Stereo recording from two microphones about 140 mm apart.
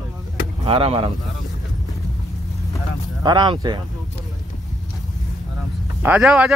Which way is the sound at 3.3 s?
30° right (ahead or behind).